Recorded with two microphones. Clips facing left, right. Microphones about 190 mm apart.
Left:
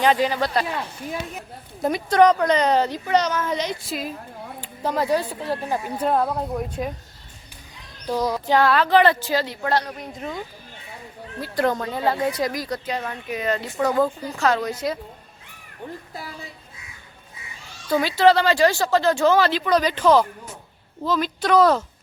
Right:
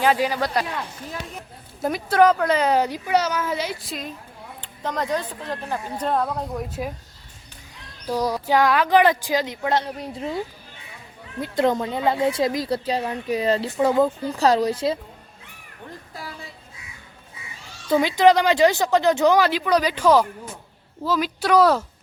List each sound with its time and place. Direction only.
0.0 s speech: 10° right (ahead or behind)
1.8 s a woman's voice: 5° right (ahead or behind)
8.0 s speech: 10° right (ahead or behind)
10.0 s a woman's voice: 30° right (ahead or behind)
13.7 s speech: 20° right (ahead or behind)
14.3 s a woman's voice: 35° right (ahead or behind)
17.8 s speech: 20° right (ahead or behind)